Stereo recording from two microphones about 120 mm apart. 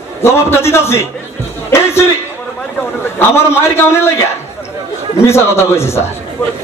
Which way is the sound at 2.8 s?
20° left (ahead or behind).